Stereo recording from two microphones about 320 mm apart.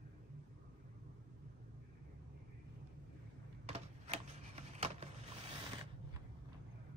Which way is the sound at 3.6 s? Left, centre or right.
Right.